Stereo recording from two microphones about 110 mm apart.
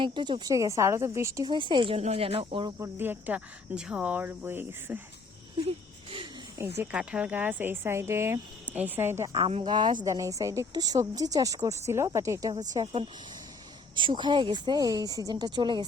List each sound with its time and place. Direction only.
0.0 s speech: 45° right (ahead or behind)
0.5 s a woman's voice: 30° right (ahead or behind)
1.5 s speech: 45° right (ahead or behind)
2.0 s speech: 75° right (ahead or behind); by 2.6 s 55° right (ahead or behind)
2.6 s speech: 25° right (ahead or behind)
6.6 s a woman's voice: 25° right (ahead or behind)
6.9 s a woman's voice: 10° right (ahead or behind)
9.3 s speech: 60° right (ahead or behind)
9.6 s speech: 45° right (ahead or behind)
10.1 s speech: 30° right (ahead or behind)
13.9 s speech: 45° right (ahead or behind)